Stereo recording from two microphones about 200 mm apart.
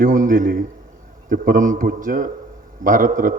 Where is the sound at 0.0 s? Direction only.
40° right (ahead or behind).